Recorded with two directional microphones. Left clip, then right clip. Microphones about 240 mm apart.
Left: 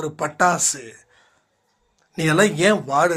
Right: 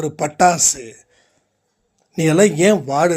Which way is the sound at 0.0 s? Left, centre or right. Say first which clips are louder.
Right 4 dB; right.